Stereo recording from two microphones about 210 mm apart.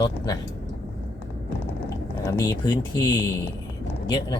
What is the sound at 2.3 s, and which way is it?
Speech, 20° left (ahead or behind).